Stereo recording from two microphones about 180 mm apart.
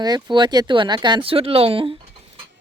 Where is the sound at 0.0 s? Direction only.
25° right (ahead or behind).